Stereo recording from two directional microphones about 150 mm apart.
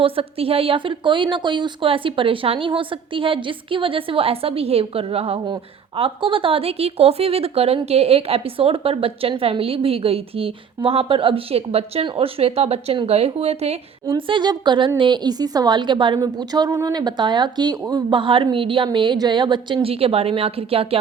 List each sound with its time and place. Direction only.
0.0 s speech: 40° right (ahead or behind)
14.1 s speech: 35° right (ahead or behind)